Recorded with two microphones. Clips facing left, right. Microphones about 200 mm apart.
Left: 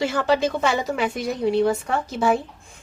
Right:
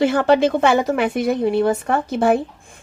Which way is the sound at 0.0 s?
55° right (ahead or behind).